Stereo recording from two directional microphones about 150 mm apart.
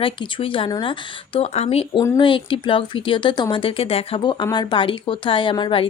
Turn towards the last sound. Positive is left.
turn(degrees=35)  # may be behind; listen again after turning